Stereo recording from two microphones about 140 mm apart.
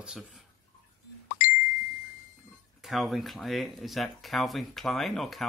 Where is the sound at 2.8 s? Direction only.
Centre (ahead or behind).